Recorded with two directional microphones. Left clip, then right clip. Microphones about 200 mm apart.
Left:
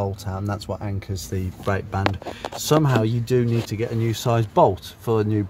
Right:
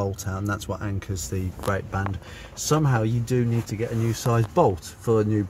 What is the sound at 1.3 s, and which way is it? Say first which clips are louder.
Speech: left 2 dB; 25° left (ahead or behind).